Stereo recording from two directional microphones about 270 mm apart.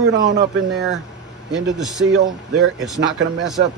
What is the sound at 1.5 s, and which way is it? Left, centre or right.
Speech, centre.